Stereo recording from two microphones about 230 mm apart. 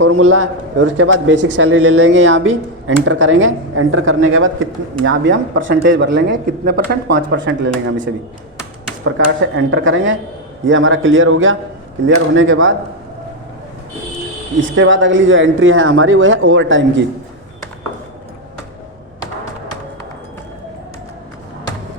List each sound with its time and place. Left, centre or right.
0.0 s a man's voice: right
9.1 s a man's voice: right
14.8 s a man's voice: right